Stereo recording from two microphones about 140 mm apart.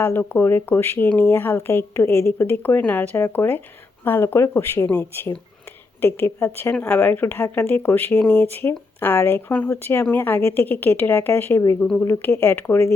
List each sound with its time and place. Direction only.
0.0 s speech: 15° left (ahead or behind)